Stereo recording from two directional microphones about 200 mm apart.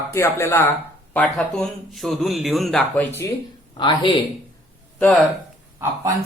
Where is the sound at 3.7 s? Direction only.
25° left (ahead or behind).